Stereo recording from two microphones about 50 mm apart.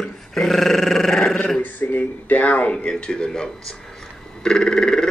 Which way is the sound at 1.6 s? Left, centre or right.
Left.